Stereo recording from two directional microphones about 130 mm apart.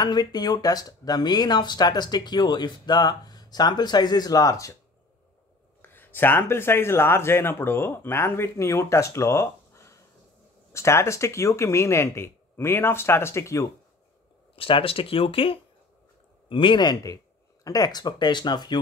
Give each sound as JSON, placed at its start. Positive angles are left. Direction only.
{"t": 0.0, "sound": "speech", "side_deg": 30}
{"t": 5.8, "sound": "speech", "side_deg": 15}
{"t": 14.5, "sound": "speech", "side_deg": 45}